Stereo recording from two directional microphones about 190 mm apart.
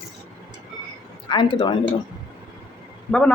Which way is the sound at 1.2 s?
25° left (ahead or behind).